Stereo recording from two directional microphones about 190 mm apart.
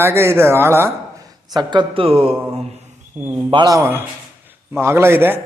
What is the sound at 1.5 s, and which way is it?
Speech, 20° right (ahead or behind).